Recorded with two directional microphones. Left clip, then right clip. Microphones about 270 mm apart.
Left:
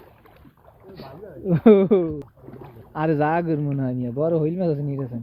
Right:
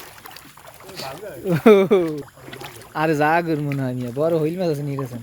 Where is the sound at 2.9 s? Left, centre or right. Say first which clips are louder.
Right 3 dB; centre.